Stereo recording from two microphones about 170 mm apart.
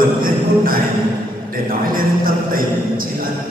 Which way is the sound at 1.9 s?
55° right (ahead or behind).